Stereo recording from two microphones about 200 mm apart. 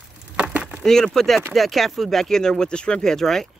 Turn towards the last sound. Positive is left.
turn(degrees=0)  # may be behind; listen again after turning